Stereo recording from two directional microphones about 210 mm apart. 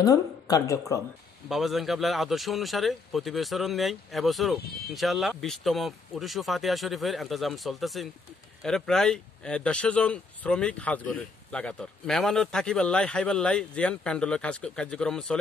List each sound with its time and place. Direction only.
0.0 s speech: 15° left (ahead or behind)
1.5 s speech: centre (ahead or behind)